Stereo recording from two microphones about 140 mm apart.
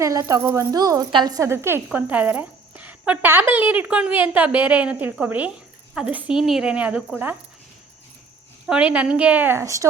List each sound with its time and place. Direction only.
0.0 s a woman's voice: 20° right (ahead or behind)
8.6 s a woman's voice: 10° right (ahead or behind)